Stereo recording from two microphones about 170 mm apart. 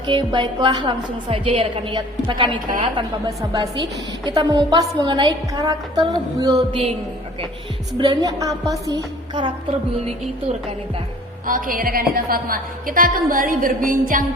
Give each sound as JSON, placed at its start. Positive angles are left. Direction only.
{"t": 0.1, "sound": "a woman's voice", "side_deg": -25}
{"t": 7.9, "sound": "a woman's voice", "side_deg": -25}
{"t": 11.4, "sound": "a woman's voice", "side_deg": -55}